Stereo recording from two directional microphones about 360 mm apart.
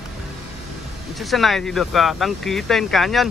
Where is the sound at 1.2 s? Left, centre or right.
Centre.